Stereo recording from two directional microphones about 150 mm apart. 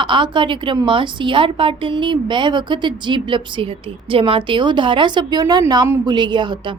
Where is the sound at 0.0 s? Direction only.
35° right (ahead or behind).